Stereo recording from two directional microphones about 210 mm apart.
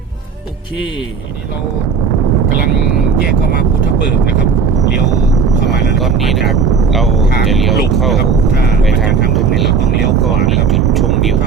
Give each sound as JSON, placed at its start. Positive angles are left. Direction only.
{"t": 3.5, "sound": "speech", "side_deg": 50}
{"t": 5.6, "sound": "vehicle", "side_deg": 55}
{"t": 6.0, "sound": "speech", "side_deg": 0}